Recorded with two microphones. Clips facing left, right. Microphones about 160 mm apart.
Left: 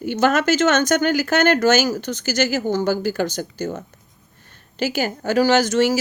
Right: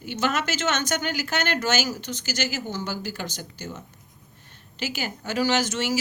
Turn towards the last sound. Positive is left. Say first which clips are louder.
# left 8 dB
turn(degrees=40)  # may be behind; listen again after turning